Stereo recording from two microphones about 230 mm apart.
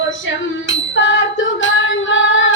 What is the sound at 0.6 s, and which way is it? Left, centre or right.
Female singing, left.